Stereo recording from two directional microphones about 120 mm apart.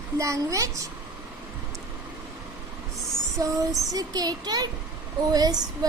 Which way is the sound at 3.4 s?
30° right (ahead or behind).